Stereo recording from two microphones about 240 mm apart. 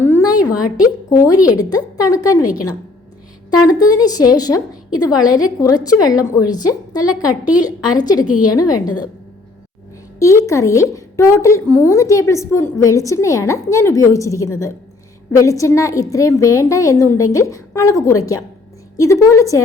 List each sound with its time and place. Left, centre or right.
0.0 s a sound: centre
1.1 s a woman's voice: centre
3.7 s a woman's voice: centre
8.2 s a woman's voice: left
10.2 s a woman's voice: centre